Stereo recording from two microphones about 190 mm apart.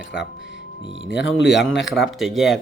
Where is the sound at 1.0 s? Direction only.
75° left (ahead or behind).